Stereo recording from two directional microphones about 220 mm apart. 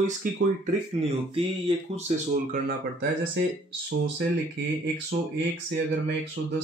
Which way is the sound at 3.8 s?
50° right (ahead or behind).